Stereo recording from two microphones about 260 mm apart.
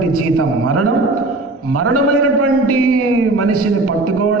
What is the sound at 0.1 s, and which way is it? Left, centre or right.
A man's voice, right.